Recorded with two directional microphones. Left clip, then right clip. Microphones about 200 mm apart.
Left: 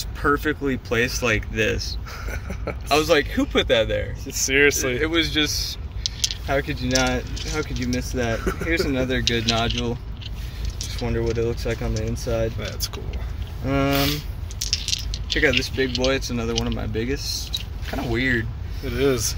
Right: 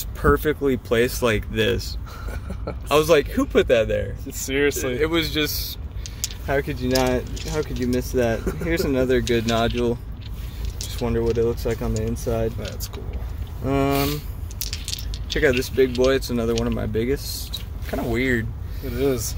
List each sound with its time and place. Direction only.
0.2 s speech: 50° right (ahead or behind)
2.2 s a sound: centre (ahead or behind)
2.9 s speech: 40° right (ahead or behind)
4.3 s speech: centre (ahead or behind)
4.9 s speech: 50° right (ahead or behind)
7.3 s speech: 35° right (ahead or behind)
7.9 s speech: 55° right (ahead or behind)
8.4 s speech: centre (ahead or behind)
8.6 s speech: 55° right (ahead or behind)
11.1 s speech: 45° right (ahead or behind)
13.7 s speech: 55° right (ahead or behind)
15.3 s speech: 55° right (ahead or behind)
18.9 s speech: 5° right (ahead or behind)